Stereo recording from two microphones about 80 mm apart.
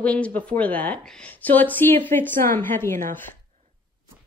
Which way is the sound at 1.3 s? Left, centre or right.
Left.